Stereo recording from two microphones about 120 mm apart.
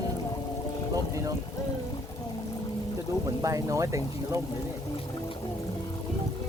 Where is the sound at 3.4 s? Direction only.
25° right (ahead or behind).